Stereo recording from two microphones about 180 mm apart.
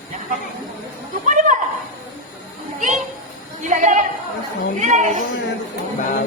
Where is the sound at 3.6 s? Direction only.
45° right (ahead or behind).